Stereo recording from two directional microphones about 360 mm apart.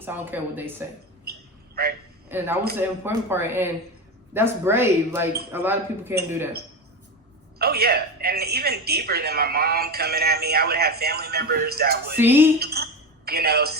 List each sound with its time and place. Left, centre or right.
0.0 s speech: centre
1.2 s a sound: right
2.3 s a man's voice: centre
7.6 s a man's voice: right
12.1 s speech: centre
12.5 s a sound: right